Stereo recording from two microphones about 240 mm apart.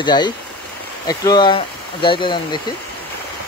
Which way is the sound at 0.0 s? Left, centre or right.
Centre.